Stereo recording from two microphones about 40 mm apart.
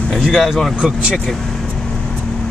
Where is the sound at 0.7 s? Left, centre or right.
Right.